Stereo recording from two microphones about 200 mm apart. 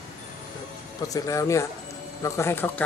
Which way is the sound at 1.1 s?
15° left (ahead or behind).